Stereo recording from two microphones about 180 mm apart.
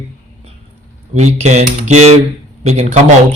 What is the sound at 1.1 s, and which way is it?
A man's voice, 40° right (ahead or behind).